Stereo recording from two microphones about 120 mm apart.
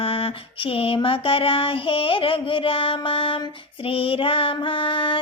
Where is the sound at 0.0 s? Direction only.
50° left (ahead or behind).